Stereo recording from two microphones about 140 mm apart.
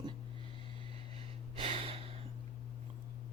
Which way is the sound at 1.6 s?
40° right (ahead or behind).